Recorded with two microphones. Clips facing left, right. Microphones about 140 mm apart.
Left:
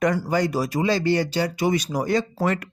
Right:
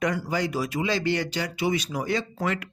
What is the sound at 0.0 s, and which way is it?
Speech, 45° left (ahead or behind).